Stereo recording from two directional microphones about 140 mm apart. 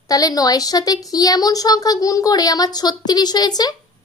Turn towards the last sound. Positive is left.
turn(degrees=30)  # may be behind; listen again after turning